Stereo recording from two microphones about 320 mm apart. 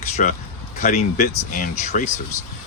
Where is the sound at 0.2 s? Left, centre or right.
Left.